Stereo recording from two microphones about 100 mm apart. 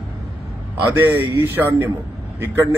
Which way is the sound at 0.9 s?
20° right (ahead or behind).